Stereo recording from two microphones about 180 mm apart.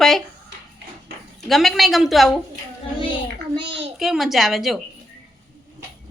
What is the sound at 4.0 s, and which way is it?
Speech, centre (ahead or behind).